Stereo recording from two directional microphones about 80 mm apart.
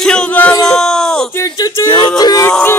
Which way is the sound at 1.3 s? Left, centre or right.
Left.